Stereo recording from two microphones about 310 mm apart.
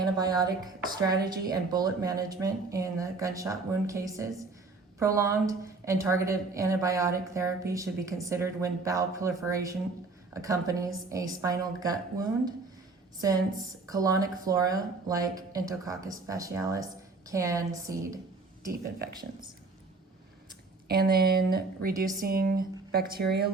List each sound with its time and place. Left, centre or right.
0.0 s speech: centre
20.8 s speech: right